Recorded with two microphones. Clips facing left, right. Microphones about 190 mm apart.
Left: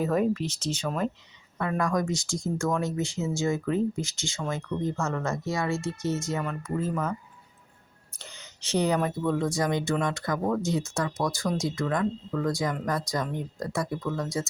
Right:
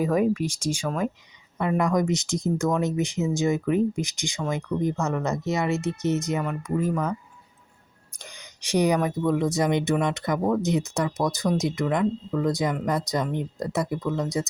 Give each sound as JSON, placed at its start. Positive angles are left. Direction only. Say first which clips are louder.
{"t": 0.0, "sound": "speech", "louder": "right 3 dB", "side_deg": -10}
{"t": 8.1, "sound": "speech", "louder": "right 2 dB", "side_deg": -15}